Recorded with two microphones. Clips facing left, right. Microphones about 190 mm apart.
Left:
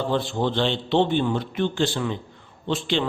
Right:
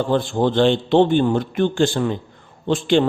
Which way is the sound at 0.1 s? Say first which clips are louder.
Right 5 dB; 50° right (ahead or behind).